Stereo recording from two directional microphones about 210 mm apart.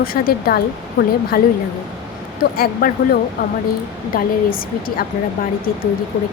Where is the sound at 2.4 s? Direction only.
45° left (ahead or behind).